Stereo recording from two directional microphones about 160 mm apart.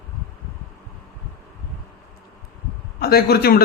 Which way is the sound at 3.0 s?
75° left (ahead or behind).